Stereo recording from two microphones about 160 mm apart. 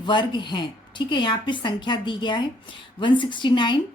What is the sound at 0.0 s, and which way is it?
Speech, 30° left (ahead or behind).